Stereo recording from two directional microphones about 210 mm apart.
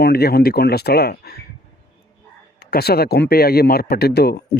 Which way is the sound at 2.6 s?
50° left (ahead or behind).